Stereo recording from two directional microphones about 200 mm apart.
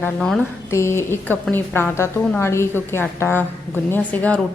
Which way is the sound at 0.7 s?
15° left (ahead or behind).